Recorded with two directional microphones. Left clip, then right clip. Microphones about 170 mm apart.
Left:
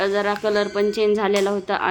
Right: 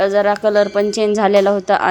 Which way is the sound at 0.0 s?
25° right (ahead or behind).